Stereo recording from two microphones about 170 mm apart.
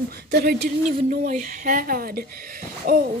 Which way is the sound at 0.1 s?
70° right (ahead or behind).